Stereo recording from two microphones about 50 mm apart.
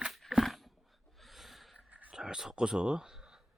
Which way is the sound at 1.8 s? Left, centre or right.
Right.